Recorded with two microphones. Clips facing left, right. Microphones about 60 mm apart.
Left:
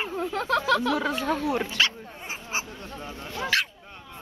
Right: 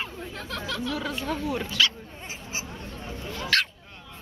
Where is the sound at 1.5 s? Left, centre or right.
Left.